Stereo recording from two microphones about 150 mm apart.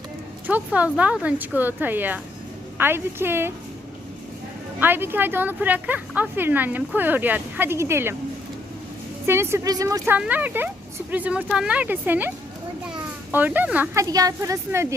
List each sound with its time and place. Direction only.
0.4 s speech: 10° right (ahead or behind)
4.8 s speech: 15° right (ahead or behind)
9.2 s speech: 15° right (ahead or behind)
10.2 s speech: 10° right (ahead or behind)
13.3 s speech: 10° right (ahead or behind)
13.9 s a woman's voice: 20° right (ahead or behind)